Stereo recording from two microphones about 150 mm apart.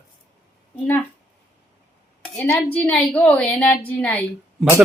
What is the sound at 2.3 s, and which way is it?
A woman's voice, 10° left (ahead or behind).